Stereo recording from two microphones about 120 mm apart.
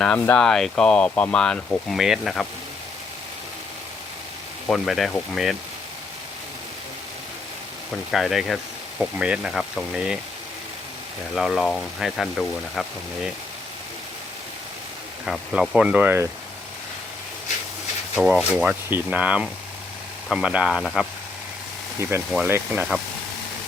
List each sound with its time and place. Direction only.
0.0 s speech: 10° left (ahead or behind)
4.7 s speech: centre (ahead or behind)
8.1 s speech: centre (ahead or behind)
11.3 s speech: centre (ahead or behind)
15.3 s speech: 5° right (ahead or behind)
18.1 s speech: 5° right (ahead or behind)
22.4 s speech: 20° right (ahead or behind)